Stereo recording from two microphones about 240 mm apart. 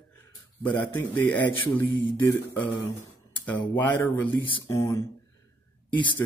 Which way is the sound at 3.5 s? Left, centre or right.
Centre.